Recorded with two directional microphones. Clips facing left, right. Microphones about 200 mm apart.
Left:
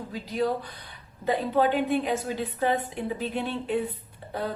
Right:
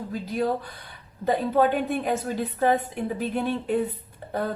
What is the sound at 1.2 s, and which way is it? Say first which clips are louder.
Speech: right 2 dB; 45° right (ahead or behind).